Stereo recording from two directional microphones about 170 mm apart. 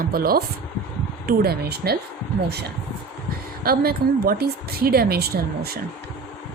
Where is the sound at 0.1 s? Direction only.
60° right (ahead or behind).